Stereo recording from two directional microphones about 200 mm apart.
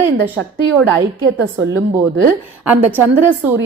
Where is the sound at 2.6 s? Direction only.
10° right (ahead or behind).